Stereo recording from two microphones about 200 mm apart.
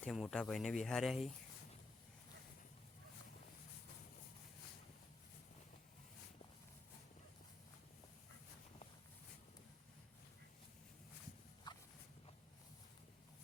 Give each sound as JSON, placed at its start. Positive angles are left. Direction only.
{"t": 0.0, "sound": "speech", "side_deg": 0}
{"t": 11.7, "sound": "walk", "side_deg": 20}